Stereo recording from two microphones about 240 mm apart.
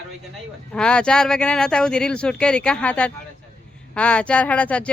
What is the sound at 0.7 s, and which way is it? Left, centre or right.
Speech, centre.